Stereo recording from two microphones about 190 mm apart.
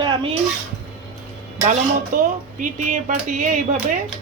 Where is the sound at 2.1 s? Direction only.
45° right (ahead or behind).